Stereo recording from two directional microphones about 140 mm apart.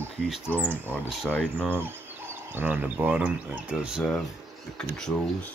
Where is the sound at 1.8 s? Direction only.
15° right (ahead or behind); by 5.5 s 5° left (ahead or behind).